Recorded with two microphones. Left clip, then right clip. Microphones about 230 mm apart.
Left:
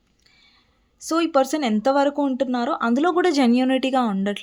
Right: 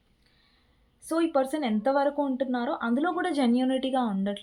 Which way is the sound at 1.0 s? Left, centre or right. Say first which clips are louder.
Left 6 dB; left.